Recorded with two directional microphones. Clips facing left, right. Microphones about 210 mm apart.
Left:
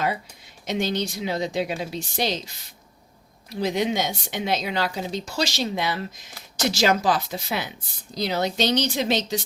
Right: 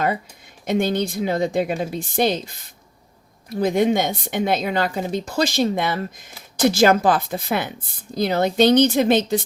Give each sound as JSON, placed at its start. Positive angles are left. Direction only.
{"t": 0.6, "sound": "a woman's voice", "side_deg": -55}